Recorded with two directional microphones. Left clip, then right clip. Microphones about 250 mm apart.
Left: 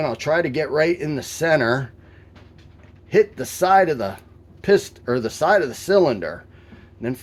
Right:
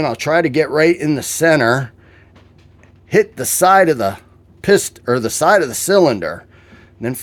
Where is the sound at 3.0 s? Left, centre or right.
Right.